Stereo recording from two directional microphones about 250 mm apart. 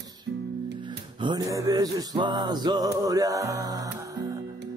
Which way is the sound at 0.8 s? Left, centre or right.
Centre.